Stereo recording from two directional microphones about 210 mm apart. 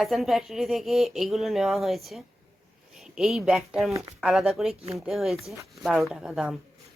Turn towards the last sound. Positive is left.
turn(degrees=-5)  # may be behind; listen again after turning